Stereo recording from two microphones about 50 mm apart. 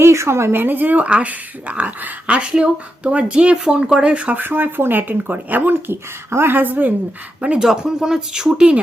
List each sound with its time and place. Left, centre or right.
0.0 s a woman's voice: right
0.6 s speech: right
1.0 s speech: right
2.2 s speech: right
4.4 s speech: right
7.6 s speech: centre